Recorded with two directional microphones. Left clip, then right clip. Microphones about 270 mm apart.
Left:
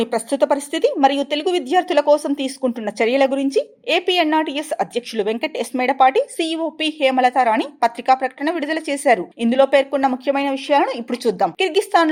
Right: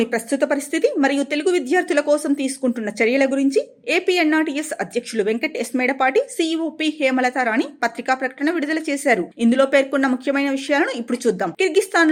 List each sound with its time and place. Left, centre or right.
0.0 s speech: left
0.5 s a woman's voice: centre
2.8 s speech: left
3.5 s a woman's voice: centre